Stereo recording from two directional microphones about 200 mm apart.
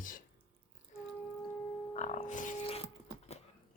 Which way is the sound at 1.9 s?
35° left (ahead or behind).